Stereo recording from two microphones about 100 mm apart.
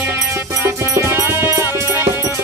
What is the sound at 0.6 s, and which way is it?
Music, 25° right (ahead or behind).